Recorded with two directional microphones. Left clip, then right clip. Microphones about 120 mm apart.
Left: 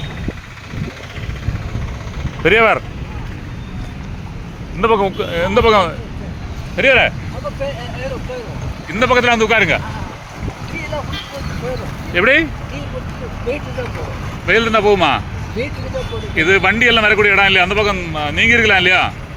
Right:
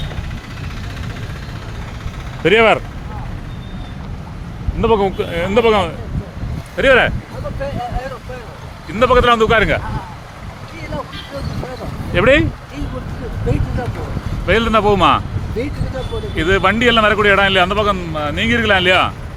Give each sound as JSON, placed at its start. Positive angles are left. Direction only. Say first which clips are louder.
{"t": 2.4, "sound": "a man's voice", "louder": "even", "side_deg": -25}
{"t": 4.9, "sound": "speech", "louder": "left 1 dB", "side_deg": -35}
{"t": 5.5, "sound": "a man's voice", "louder": "left 1 dB", "side_deg": -20}
{"t": 8.9, "sound": "a man's voice", "louder": "right 1 dB", "side_deg": -20}
{"t": 12.1, "sound": "a man's voice", "louder": "even", "side_deg": -25}
{"t": 14.4, "sound": "a man's voice", "louder": "left 1 dB", "side_deg": -25}